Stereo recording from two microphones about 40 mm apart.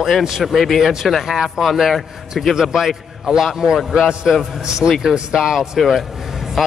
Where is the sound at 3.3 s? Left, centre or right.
Centre.